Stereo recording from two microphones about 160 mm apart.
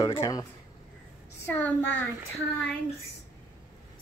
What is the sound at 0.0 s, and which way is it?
A child's voice, 20° left (ahead or behind).